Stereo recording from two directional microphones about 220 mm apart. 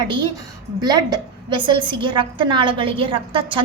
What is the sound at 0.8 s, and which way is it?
A woman's voice, 20° right (ahead or behind).